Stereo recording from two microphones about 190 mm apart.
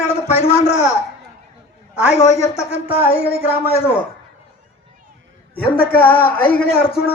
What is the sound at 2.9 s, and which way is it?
Music, 50° left (ahead or behind).